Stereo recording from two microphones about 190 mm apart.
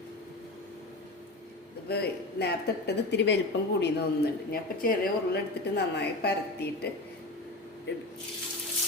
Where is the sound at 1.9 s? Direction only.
60° left (ahead or behind).